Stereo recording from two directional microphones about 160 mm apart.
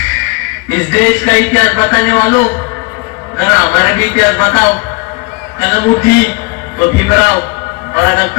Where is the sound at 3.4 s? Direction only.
10° left (ahead or behind).